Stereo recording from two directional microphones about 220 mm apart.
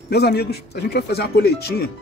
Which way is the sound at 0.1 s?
45° left (ahead or behind).